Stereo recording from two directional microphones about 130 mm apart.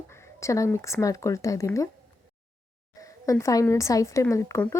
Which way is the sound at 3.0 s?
25° left (ahead or behind).